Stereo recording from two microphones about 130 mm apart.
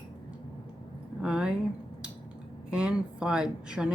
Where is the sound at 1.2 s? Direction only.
5° right (ahead or behind).